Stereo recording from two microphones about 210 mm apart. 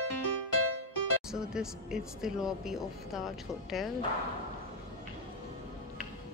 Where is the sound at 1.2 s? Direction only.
5° right (ahead or behind).